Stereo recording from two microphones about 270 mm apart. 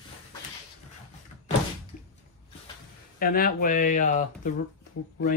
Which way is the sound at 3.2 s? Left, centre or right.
Left.